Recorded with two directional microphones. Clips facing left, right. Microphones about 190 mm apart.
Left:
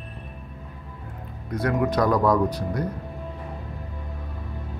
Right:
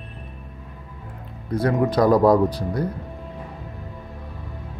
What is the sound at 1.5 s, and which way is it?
Speech, 30° right (ahead or behind).